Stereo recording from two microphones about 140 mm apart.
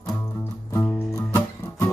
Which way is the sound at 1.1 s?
20° left (ahead or behind).